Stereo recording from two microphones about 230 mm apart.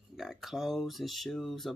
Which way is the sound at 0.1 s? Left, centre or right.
Centre.